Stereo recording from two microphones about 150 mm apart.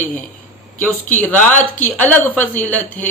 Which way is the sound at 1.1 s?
10° left (ahead or behind).